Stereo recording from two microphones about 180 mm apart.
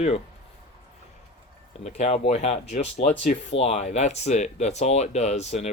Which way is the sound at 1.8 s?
40° left (ahead or behind).